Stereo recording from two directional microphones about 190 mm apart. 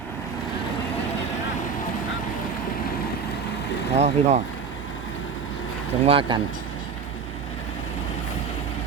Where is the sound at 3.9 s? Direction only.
35° right (ahead or behind).